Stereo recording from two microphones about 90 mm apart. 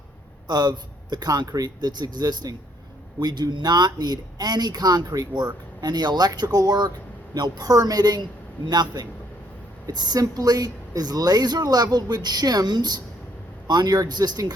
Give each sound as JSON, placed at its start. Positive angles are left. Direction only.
{"t": 0.4, "sound": "speech", "side_deg": -50}